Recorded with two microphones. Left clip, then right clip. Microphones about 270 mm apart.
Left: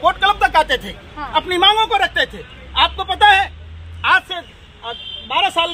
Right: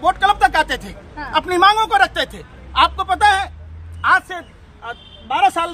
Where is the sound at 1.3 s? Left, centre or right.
Centre.